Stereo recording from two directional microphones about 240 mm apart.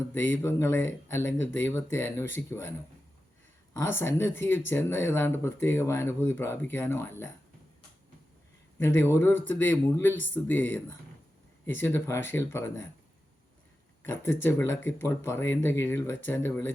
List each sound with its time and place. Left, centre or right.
0.1 s speech: centre
3.8 s speech: centre
8.8 s speech: centre
14.0 s speech: centre